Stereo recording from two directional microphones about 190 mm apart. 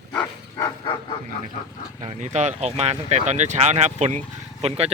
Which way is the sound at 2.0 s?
40° right (ahead or behind).